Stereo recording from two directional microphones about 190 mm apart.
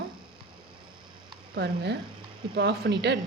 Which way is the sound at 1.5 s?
60° right (ahead or behind).